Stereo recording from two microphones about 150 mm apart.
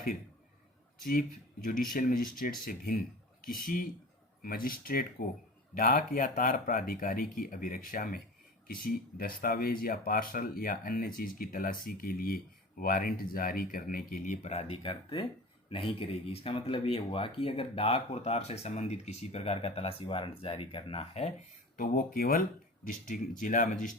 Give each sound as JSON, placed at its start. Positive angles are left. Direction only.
{"t": 1.6, "sound": "speech", "side_deg": 65}
{"t": 14.8, "sound": "speech", "side_deg": 35}
{"t": 21.8, "sound": "speech", "side_deg": 65}
{"t": 22.9, "sound": "speech", "side_deg": 60}